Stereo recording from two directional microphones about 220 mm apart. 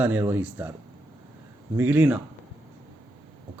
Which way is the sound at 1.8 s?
10° right (ahead or behind).